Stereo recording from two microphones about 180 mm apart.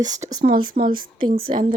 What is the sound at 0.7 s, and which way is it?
Speech, 50° right (ahead or behind).